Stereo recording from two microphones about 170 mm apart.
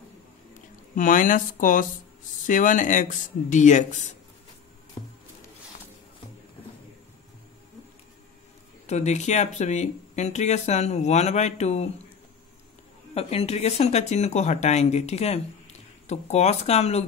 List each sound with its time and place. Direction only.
0.9 s speech: 50° left (ahead or behind)
5.0 s a sound: 30° left (ahead or behind)
8.8 s speech: 40° left (ahead or behind)
13.1 s speech: 35° left (ahead or behind)